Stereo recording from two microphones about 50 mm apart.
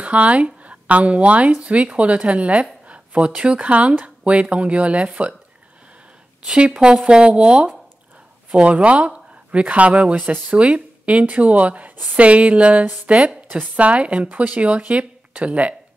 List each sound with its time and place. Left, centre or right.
0.0 s speech: right
6.4 s speech: centre